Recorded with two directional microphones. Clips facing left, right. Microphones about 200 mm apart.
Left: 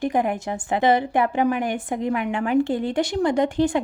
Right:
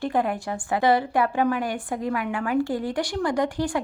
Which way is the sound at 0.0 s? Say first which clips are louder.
Left 2 dB; 20° left (ahead or behind).